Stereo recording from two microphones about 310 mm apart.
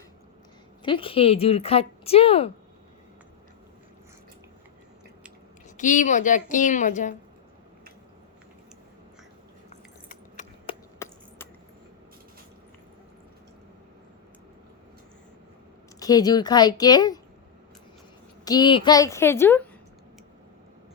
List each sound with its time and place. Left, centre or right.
0.8 s a woman's voice: centre
5.7 s a woman's voice: left
10.1 s keys jangling: left
11.0 s a sound: centre
16.0 s speech: centre
18.4 s speech: centre